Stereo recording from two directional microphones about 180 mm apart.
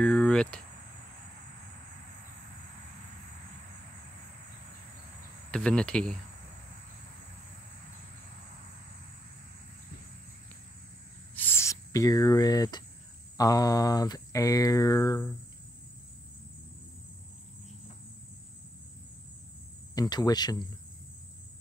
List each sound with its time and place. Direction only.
0.0 s speech: 5° left (ahead or behind)
5.5 s cricket: 5° left (ahead or behind)
11.3 s cricket: 10° left (ahead or behind)
13.4 s speech: 20° left (ahead or behind)
19.9 s speech: 20° left (ahead or behind)